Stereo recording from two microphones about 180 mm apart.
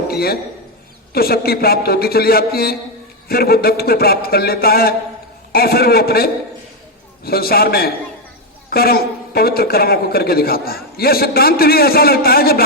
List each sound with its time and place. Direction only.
0.1 s a man's voice: 60° left (ahead or behind)